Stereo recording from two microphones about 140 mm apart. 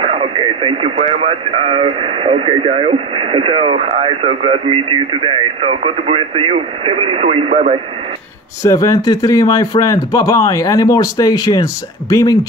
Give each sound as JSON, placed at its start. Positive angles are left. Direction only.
{"t": 0.0, "sound": "speech", "side_deg": -45}
{"t": 8.6, "sound": "speech", "side_deg": 25}